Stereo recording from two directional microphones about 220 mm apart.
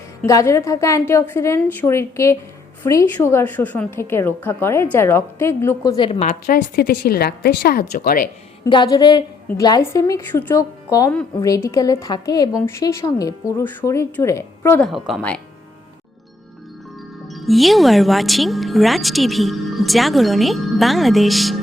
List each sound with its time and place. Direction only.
0.2 s a woman's voice: 15° left (ahead or behind)
6.4 s speech: 45° left (ahead or behind)
8.6 s a woman's voice: 20° left (ahead or behind); by 15.4 s 5° left (ahead or behind)
17.2 s speech: centre (ahead or behind)